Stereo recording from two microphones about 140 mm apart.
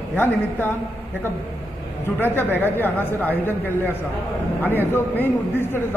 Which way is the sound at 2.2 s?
15° left (ahead or behind).